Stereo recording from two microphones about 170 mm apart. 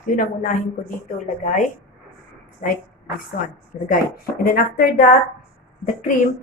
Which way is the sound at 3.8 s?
60° left (ahead or behind).